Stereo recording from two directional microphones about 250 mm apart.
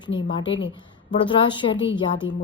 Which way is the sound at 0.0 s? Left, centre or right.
Centre.